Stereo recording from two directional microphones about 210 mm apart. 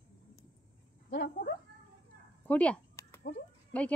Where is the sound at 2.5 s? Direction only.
5° left (ahead or behind).